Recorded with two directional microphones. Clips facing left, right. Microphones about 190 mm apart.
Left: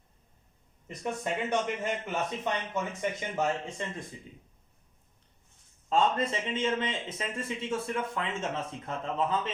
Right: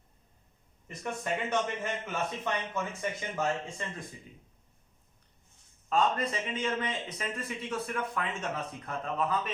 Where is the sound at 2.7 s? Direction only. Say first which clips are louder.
Left 2 dB; 20° left (ahead or behind).